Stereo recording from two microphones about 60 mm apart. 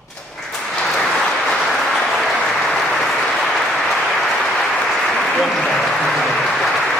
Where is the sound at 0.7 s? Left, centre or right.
Centre.